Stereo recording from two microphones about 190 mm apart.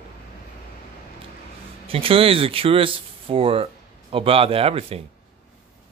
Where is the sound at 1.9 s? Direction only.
30° right (ahead or behind).